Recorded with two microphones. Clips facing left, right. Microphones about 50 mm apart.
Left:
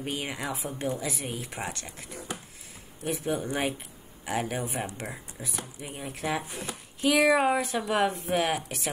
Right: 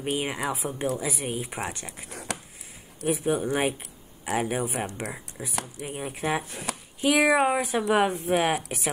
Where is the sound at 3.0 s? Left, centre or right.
Centre.